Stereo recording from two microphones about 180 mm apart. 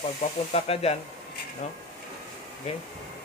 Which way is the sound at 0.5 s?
35° left (ahead or behind).